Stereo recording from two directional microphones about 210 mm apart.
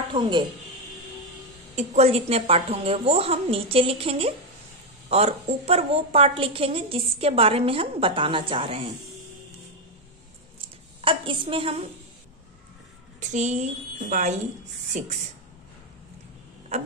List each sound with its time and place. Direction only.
0.1 s a woman's voice: 20° right (ahead or behind)
1.8 s a woman's voice: 30° right (ahead or behind)
11.0 s a woman's voice: 25° right (ahead or behind)
13.2 s a woman's voice: 35° right (ahead or behind)